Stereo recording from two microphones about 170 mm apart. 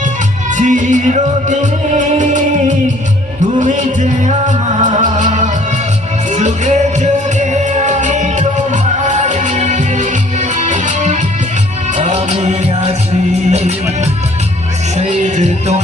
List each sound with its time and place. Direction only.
0.5 s music: 50° right (ahead or behind)